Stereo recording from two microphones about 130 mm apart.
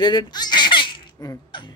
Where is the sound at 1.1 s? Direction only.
25° left (ahead or behind).